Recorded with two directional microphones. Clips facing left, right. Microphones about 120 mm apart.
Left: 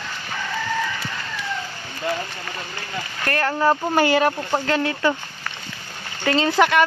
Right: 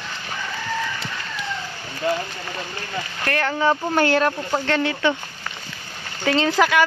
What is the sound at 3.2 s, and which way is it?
Speech, centre (ahead or behind).